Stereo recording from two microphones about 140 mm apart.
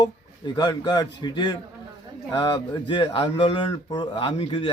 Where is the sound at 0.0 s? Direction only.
30° left (ahead or behind).